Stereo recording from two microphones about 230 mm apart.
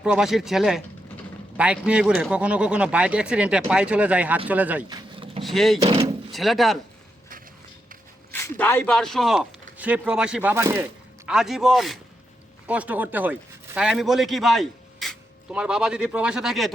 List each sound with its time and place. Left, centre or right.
0.0 s speech: centre
4.9 s vehicle: right
5.4 s speech: centre
8.3 s a man's voice: centre